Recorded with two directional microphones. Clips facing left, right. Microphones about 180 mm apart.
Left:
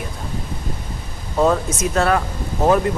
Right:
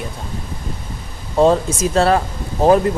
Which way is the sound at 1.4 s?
30° right (ahead or behind).